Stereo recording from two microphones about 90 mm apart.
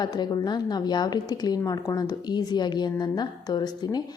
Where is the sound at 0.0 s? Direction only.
50° left (ahead or behind).